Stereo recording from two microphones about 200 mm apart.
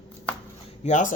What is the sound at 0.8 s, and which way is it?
Speech, 40° left (ahead or behind).